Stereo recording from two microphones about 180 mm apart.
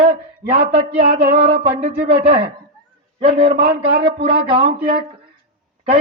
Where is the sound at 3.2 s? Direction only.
30° right (ahead or behind).